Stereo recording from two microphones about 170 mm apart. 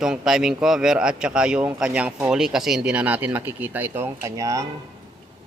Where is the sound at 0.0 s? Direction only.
Centre (ahead or behind); by 4.6 s 20° right (ahead or behind).